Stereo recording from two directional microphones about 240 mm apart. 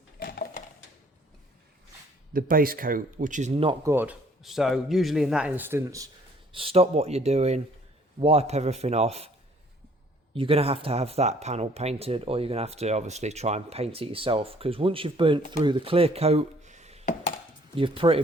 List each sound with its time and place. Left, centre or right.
0.2 s a sound: left
2.3 s speech: right
3.8 s a man's voice: centre
6.5 s speech: right
10.3 s speech: right